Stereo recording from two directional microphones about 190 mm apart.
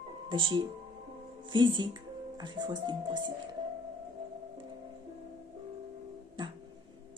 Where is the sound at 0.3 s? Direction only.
25° right (ahead or behind).